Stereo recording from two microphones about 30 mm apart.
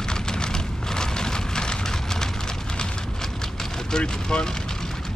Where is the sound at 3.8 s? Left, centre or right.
Left.